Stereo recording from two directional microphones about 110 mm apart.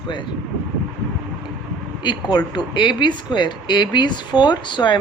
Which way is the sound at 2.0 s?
40° left (ahead or behind).